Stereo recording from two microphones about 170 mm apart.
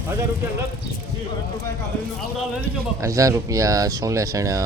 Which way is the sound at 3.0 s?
20° right (ahead or behind).